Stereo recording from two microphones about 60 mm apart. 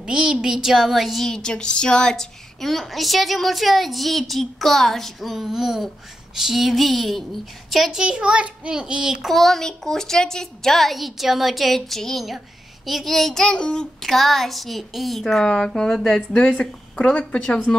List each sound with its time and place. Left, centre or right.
0.0 s a woman's voice: centre
9.3 s a woman's voice: centre